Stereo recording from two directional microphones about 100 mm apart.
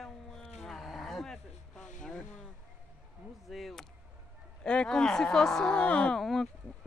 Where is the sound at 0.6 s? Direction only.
Centre (ahead or behind).